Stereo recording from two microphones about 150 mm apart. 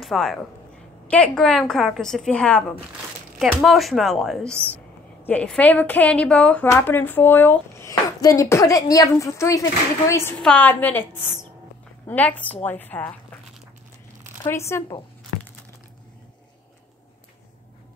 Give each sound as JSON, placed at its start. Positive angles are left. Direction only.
{"t": 0.0, "sound": "a woman's voice", "side_deg": 0}
{"t": 12.1, "sound": "a woman's voice", "side_deg": 10}
{"t": 14.5, "sound": "speech", "side_deg": 20}